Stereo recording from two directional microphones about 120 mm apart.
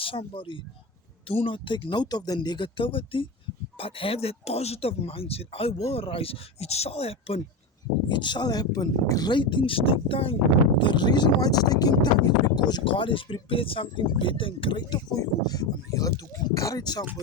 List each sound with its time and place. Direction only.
0.0 s speech: 50° left (ahead or behind)
8.1 s speech: 40° left (ahead or behind)
10.8 s speech: 40° left (ahead or behind)